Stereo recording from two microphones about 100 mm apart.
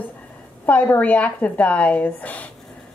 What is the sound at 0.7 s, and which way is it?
A woman's voice, 15° left (ahead or behind).